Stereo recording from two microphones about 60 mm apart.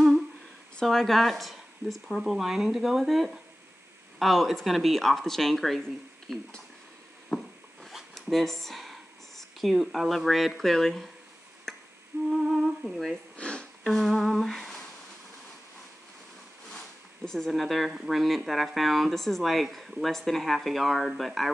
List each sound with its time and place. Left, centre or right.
0.8 s speech: centre
7.3 s a sound: centre
12.3 s speech: centre
13.1 s sniff: centre
13.8 s humming: centre
16.7 s zipper: centre
17.9 s speech: centre